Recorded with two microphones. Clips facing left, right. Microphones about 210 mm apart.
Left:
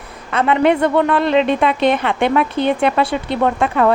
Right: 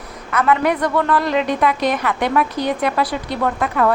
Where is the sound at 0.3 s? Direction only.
25° left (ahead or behind).